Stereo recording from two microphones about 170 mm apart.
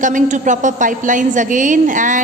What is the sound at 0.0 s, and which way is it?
A woman's voice, 50° right (ahead or behind).